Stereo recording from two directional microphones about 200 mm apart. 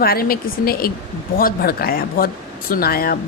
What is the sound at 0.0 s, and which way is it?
A woman's voice, 50° left (ahead or behind).